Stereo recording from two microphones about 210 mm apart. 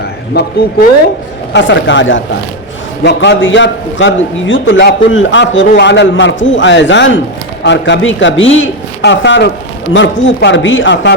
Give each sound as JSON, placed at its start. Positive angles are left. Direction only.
{"t": 0.4, "sound": "a man's voice", "side_deg": 55}
{"t": 1.5, "sound": "a man's voice", "side_deg": 60}